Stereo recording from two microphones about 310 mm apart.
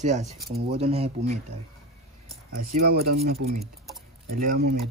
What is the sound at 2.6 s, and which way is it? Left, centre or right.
Speech, right.